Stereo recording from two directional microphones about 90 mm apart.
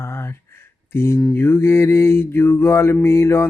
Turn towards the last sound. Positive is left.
turn(degrees=30)  # may be behind; listen again after turning